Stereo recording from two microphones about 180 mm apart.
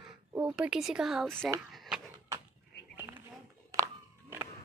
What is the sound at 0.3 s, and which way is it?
A woman's voice, 5° right (ahead or behind).